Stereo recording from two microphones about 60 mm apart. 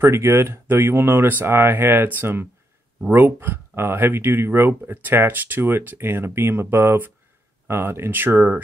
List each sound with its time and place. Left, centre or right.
0.0 s speech: right